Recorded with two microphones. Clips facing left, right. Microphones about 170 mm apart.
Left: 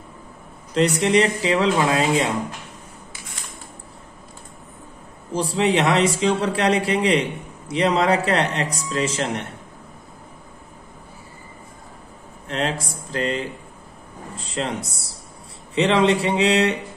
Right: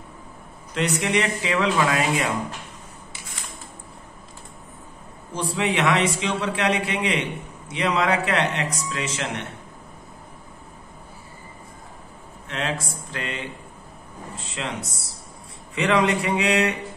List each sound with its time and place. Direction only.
0.7 s a man's voice: 30° left (ahead or behind)
5.3 s a man's voice: 35° left (ahead or behind)
12.4 s a man's voice: 35° left (ahead or behind)